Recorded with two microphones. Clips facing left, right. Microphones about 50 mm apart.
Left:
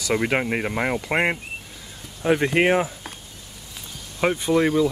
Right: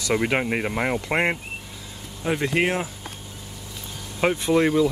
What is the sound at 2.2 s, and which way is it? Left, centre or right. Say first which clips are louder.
Speech: left 4 dB; centre.